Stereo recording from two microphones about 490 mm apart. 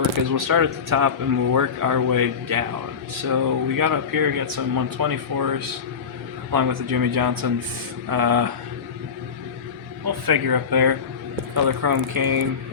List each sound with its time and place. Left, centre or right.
0.3 s speech: right
10.2 s speech: right